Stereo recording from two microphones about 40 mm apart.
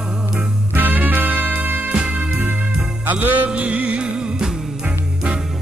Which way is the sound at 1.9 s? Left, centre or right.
Right.